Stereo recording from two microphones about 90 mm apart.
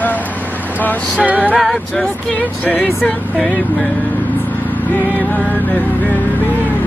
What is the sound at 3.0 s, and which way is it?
Speech, 15° left (ahead or behind).